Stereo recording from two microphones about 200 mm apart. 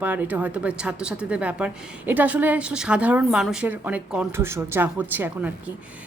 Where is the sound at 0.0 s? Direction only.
10° right (ahead or behind).